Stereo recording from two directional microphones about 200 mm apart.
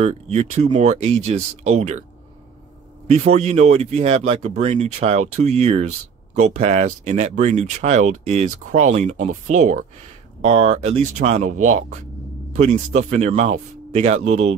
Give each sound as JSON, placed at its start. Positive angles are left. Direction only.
{"t": 0.0, "sound": "speech", "side_deg": -35}
{"t": 3.1, "sound": "speech", "side_deg": -35}